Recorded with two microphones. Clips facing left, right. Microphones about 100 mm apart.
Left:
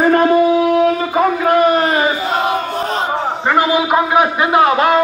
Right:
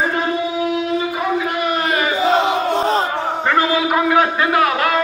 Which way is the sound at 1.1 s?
45° left (ahead or behind).